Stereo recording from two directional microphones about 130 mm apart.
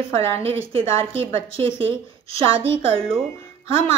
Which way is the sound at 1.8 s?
45° right (ahead or behind).